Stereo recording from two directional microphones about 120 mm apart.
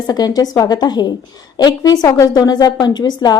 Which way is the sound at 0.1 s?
30° left (ahead or behind).